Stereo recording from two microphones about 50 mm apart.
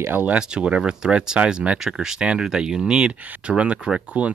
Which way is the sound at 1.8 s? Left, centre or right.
Centre.